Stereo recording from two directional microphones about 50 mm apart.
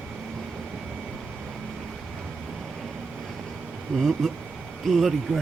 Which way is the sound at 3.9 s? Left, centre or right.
Centre.